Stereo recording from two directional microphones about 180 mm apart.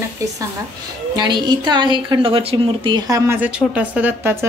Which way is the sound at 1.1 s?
25° right (ahead or behind).